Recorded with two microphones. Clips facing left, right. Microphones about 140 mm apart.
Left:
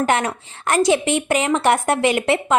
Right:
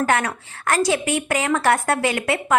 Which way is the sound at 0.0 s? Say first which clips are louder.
Left 1 dB; 20° left (ahead or behind).